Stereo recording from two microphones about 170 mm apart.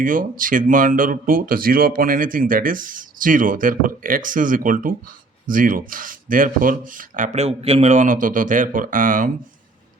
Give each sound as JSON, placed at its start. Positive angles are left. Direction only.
{"t": 0.0, "sound": "speech", "side_deg": -55}